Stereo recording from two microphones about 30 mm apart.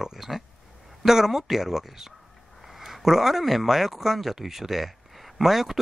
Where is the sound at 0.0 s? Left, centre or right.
Centre.